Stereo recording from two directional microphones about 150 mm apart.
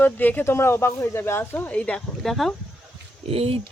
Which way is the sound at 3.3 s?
40° right (ahead or behind).